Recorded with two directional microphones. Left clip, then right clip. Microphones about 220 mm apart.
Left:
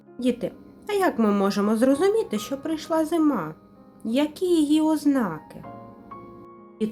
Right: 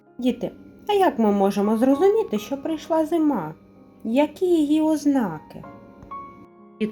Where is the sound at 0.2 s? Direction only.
Centre (ahead or behind).